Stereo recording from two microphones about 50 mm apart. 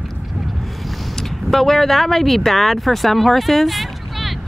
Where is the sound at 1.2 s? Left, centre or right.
Centre.